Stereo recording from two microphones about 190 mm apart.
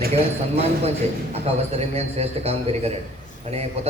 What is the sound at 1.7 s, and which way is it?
A man's voice, 35° right (ahead or behind).